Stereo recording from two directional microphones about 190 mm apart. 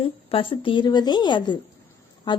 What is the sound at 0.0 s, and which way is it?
Speech, 30° left (ahead or behind).